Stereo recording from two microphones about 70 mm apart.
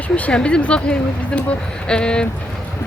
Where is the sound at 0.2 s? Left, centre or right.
Centre.